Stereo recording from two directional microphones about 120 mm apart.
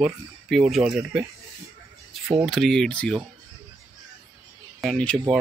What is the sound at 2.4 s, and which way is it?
Speech, centre (ahead or behind).